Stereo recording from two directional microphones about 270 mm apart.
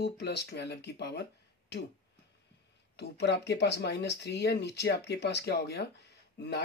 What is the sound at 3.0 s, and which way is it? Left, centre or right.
Speech, left.